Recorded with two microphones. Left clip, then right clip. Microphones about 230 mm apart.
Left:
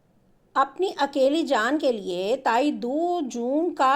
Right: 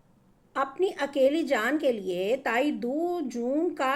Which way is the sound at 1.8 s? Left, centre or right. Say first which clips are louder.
Left 2 dB; left.